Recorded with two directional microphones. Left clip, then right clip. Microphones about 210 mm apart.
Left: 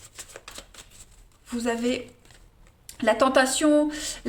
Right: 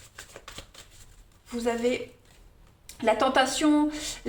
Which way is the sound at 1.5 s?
35° left (ahead or behind).